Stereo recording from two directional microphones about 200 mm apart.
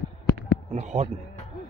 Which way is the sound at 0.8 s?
35° right (ahead or behind).